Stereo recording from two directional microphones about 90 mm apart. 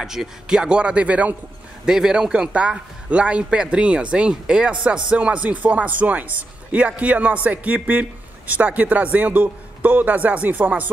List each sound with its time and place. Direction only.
0.0 s speech: 5° right (ahead or behind)